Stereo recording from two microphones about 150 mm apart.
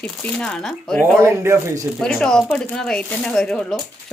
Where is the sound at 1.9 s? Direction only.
5° left (ahead or behind).